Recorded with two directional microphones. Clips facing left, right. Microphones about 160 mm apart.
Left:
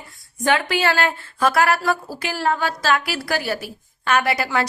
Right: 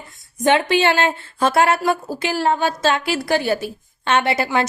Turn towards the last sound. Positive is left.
turn(degrees=-25)  # may be behind; listen again after turning